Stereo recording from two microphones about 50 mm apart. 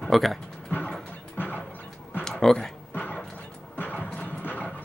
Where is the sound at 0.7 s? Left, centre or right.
Left.